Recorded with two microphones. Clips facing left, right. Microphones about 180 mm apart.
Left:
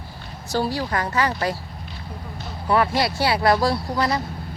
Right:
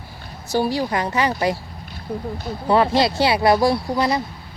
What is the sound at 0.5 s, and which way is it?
Speech, 15° right (ahead or behind).